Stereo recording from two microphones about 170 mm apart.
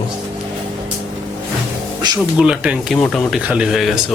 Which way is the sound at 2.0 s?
25° right (ahead or behind).